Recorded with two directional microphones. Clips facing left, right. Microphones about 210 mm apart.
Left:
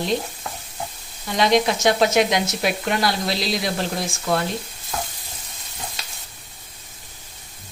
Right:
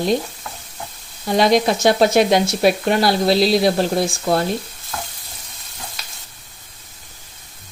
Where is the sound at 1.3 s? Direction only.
40° right (ahead or behind).